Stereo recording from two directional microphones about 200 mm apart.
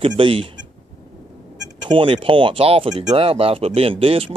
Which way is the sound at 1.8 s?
25° right (ahead or behind).